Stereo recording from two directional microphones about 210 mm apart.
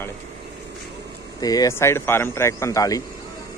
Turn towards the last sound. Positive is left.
turn(degrees=15)  # may be behind; listen again after turning